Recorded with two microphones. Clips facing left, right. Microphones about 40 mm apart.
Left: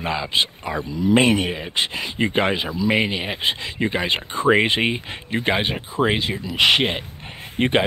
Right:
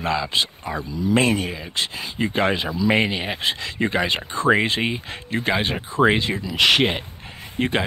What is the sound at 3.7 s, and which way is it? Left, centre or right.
Speech, centre.